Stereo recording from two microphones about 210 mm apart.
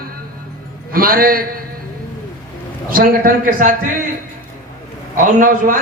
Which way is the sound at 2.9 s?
45° right (ahead or behind).